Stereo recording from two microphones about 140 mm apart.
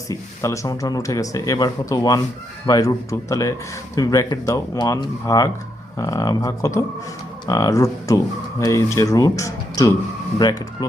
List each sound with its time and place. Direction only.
0.1 s speech: 20° left (ahead or behind)